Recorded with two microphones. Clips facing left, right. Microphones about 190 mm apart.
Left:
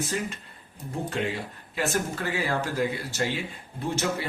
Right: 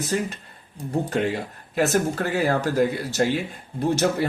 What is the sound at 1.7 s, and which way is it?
Speech, 45° right (ahead or behind).